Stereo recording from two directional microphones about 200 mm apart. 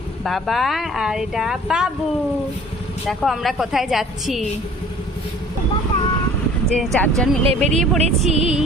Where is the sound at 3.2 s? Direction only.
Centre (ahead or behind).